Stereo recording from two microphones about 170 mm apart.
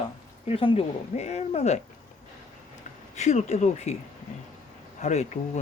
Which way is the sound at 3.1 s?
45° left (ahead or behind).